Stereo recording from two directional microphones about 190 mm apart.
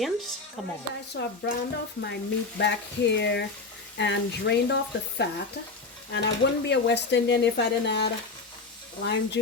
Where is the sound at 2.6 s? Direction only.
65° left (ahead or behind).